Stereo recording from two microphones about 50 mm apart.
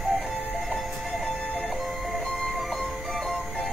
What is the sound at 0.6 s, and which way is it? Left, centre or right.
Music, centre.